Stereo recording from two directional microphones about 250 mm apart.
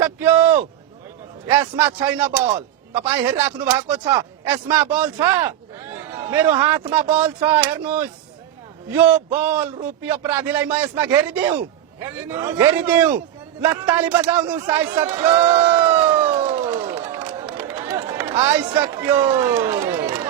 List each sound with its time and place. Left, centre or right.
0.0 s a sound: centre
1.5 s a man's voice: centre
6.1 s a sound: centre
6.6 s a man's voice: centre
16.4 s crowd: right
17.1 s run: centre
18.4 s a man's voice: centre